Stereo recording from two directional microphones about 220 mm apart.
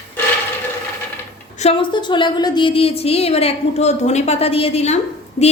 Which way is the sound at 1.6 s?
25° left (ahead or behind).